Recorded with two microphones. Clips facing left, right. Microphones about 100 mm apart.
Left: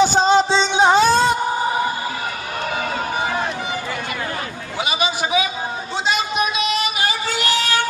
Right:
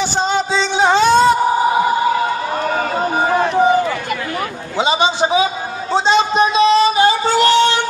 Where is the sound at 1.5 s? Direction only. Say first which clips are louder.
Right 6 dB; 20° right (ahead or behind).